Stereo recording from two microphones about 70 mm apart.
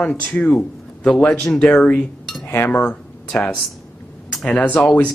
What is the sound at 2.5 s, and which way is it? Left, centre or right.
Speech, left.